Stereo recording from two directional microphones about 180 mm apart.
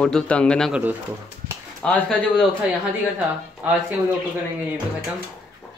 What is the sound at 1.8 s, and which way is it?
Speech, 5° left (ahead or behind).